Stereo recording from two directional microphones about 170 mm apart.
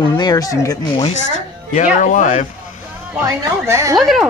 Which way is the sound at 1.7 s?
45° left (ahead or behind).